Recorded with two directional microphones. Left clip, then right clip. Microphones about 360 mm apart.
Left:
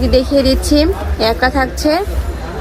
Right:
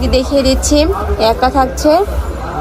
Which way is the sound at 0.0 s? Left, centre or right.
Centre.